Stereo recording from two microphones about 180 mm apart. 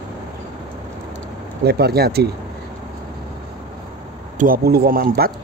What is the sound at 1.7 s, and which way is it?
Speech, 60° right (ahead or behind).